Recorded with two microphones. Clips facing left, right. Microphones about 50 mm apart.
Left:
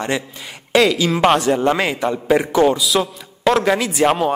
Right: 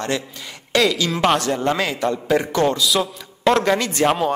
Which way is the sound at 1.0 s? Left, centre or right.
Centre.